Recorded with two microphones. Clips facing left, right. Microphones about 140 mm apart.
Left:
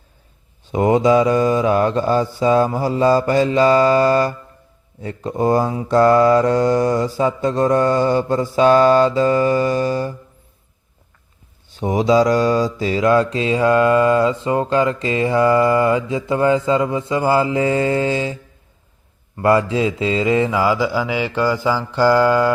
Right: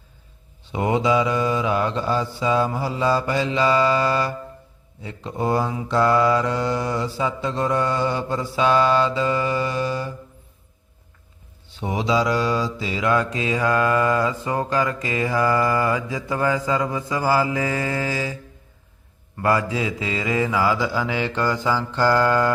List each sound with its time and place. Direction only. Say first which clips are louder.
0.6 s mantra: left 6 dB; 40° left (ahead or behind)
11.7 s mantra: left 7 dB; 45° left (ahead or behind); by 18.3 s 25° left (ahead or behind)
19.4 s mantra: left 6 dB; 25° left (ahead or behind); by 22.5 s 10° left (ahead or behind)